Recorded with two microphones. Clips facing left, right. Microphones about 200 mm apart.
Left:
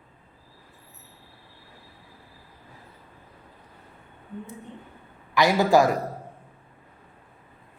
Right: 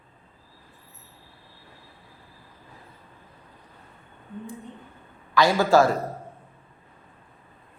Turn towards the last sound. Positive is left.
turn(degrees=15)  # may be behind; listen again after turning